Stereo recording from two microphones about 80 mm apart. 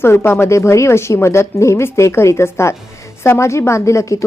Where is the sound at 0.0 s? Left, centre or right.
Left.